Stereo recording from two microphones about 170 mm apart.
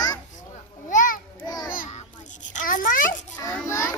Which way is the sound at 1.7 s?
45° left (ahead or behind).